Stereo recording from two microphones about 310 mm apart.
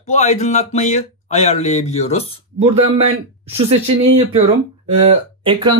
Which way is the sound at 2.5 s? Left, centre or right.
Centre.